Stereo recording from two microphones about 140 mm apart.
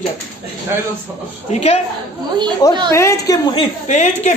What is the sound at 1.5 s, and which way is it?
Speech, 50° left (ahead or behind).